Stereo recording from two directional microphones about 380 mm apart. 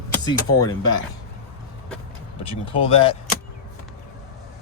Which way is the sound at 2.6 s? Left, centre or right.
Centre.